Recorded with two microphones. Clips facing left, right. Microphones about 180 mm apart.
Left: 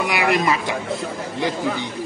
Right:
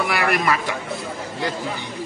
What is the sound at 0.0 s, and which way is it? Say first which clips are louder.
Speech: left 2 dB; 15° left (ahead or behind).